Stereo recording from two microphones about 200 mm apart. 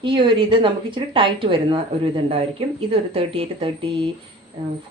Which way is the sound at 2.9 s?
30° right (ahead or behind).